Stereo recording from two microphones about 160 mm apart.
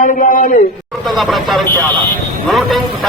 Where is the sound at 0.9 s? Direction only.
Centre (ahead or behind).